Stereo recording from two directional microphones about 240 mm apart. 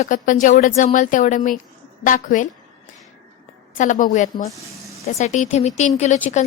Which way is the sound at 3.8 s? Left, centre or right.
Left.